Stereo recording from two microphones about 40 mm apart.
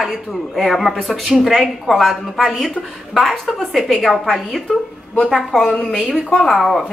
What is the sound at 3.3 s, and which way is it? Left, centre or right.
Speech, centre.